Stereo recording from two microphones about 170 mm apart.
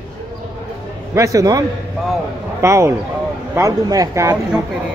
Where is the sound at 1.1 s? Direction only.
20° right (ahead or behind).